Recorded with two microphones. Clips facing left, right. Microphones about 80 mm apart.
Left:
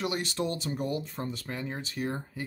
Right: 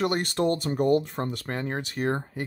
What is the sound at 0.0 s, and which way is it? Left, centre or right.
Speech, right.